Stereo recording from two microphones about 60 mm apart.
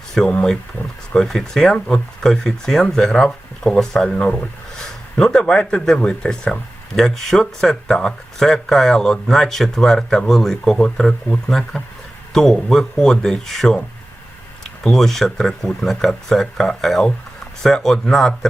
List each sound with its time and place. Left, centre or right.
0.2 s speech: centre
0.8 s speech: left
1.1 s speech: centre
14.8 s speech: centre